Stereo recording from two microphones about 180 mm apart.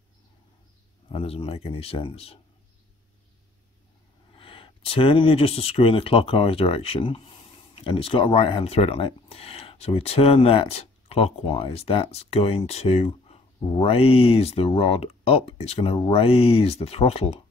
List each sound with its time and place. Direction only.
1.0 s speech: 30° left (ahead or behind)
4.4 s speech: 30° left (ahead or behind)